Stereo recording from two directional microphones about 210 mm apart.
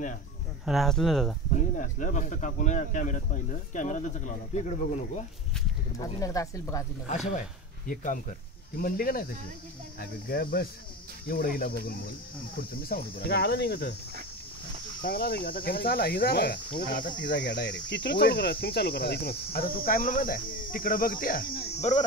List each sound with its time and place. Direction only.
0.7 s speech: centre (ahead or behind)
1.5 s speech: 35° left (ahead or behind)
5.9 s speech: 15° left (ahead or behind)
7.1 s speech: 35° left (ahead or behind)
7.9 s cricket: 40° left (ahead or behind)
12.8 s cricket: 45° left (ahead or behind)
15.0 s cricket: 45° left (ahead or behind)